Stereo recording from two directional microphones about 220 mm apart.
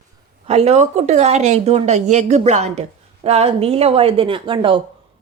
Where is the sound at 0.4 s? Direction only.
30° right (ahead or behind).